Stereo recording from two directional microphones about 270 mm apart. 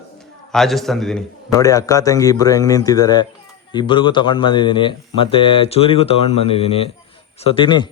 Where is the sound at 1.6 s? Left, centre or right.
Centre.